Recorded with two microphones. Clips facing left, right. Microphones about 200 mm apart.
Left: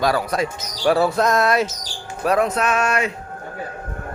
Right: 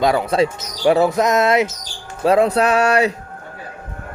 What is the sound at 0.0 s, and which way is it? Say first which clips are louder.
Speech: right 4 dB; 20° right (ahead or behind).